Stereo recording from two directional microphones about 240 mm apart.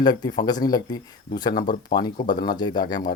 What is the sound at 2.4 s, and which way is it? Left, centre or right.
Speech, centre.